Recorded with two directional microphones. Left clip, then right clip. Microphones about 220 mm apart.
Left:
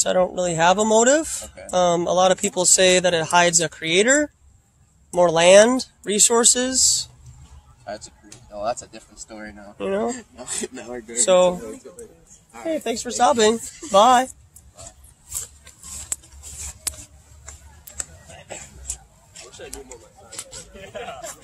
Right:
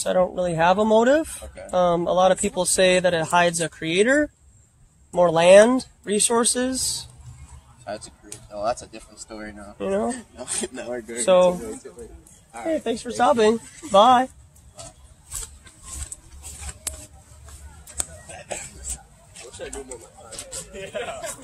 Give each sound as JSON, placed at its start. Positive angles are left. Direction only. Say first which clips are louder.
{"t": 0.0, "sound": "speech", "louder": "left 1 dB", "side_deg": 45}
{"t": 1.4, "sound": "speech", "louder": "even", "side_deg": 10}
{"t": 1.7, "sound": "speech", "louder": "left 1 dB", "side_deg": 45}
{"t": 7.8, "sound": "speech", "louder": "even", "side_deg": 10}
{"t": 9.8, "sound": "speech", "louder": "left 1 dB", "side_deg": 45}
{"t": 10.3, "sound": "speech", "louder": "even", "side_deg": 10}
{"t": 11.1, "sound": "speech", "louder": "left 1 dB", "side_deg": 45}
{"t": 12.7, "sound": "speech", "louder": "even", "side_deg": 45}
{"t": 16.9, "sound": "a sound", "louder": "left 3 dB", "side_deg": 35}
{"t": 19.3, "sound": "a sound", "louder": "right 3 dB", "side_deg": 15}
{"t": 20.9, "sound": "a man's voice", "louder": "right 3 dB", "side_deg": -50}